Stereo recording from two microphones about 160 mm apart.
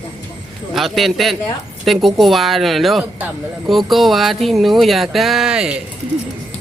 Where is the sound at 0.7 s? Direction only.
Centre (ahead or behind).